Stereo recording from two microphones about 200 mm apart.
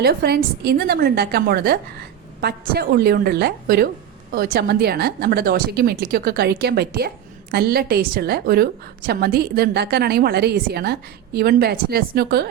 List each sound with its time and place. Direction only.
0.0 s a woman's voice: 50° right (ahead or behind)